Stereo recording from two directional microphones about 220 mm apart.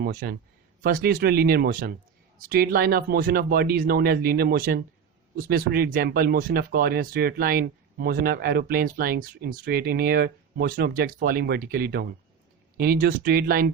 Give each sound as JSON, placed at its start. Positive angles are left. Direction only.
{"t": 0.0, "sound": "speech", "side_deg": -40}